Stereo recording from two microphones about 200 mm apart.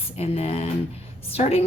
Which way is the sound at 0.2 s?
30° left (ahead or behind).